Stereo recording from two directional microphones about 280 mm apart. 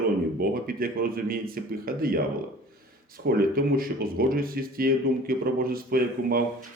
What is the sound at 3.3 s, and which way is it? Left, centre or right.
Speech, right.